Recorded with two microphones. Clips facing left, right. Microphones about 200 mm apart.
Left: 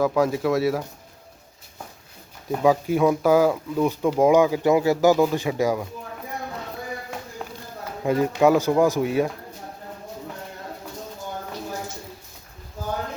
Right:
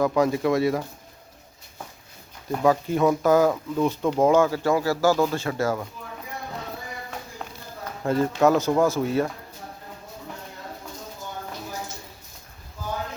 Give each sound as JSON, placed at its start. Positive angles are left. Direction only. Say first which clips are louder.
{"t": 0.0, "sound": "speech", "louder": "even", "side_deg": 5}
{"t": 2.6, "sound": "speech", "louder": "left 1 dB", "side_deg": 10}
{"t": 7.4, "sound": "run", "louder": "left 3 dB", "side_deg": 5}
{"t": 8.0, "sound": "speech", "louder": "left 1 dB", "side_deg": 15}